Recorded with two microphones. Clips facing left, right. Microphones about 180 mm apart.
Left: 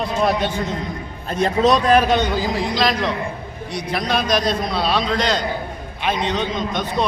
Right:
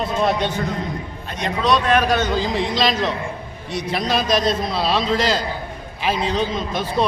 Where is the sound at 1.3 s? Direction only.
45° left (ahead or behind).